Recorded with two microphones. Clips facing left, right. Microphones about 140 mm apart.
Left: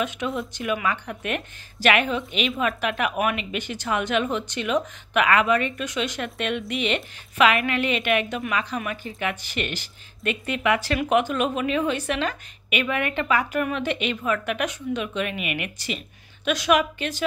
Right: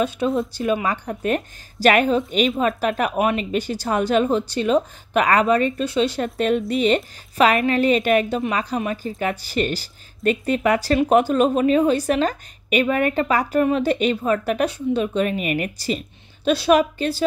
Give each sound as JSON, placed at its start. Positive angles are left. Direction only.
{"t": 0.0, "sound": "speech", "side_deg": -30}